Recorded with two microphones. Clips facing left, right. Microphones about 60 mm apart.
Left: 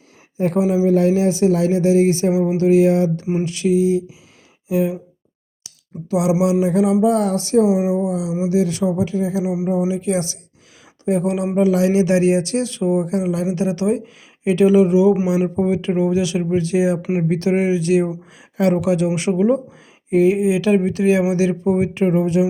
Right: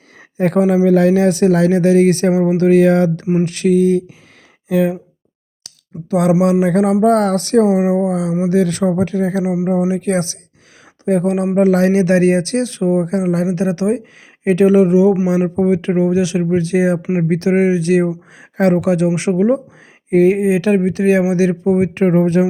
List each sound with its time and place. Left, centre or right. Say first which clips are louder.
0.3 s speech: right 4 dB; right
2.3 s speech: right 3 dB; right
2.6 s speech: right 2 dB; right
3.4 s speech: right 3 dB; right
6.1 s speech: right 4 dB; right
6.4 s speech: right 3 dB; right
8.1 s speech: right 4 dB; right
8.8 s speech: right 3 dB; right
9.1 s speech: right 3 dB; right
9.4 s speech: right 3 dB; right
9.9 s speech: right 3 dB; right
17.0 s speech: right 3 dB; centre
17.2 s speech: right 4 dB; right
22.0 s speech: right 3 dB; right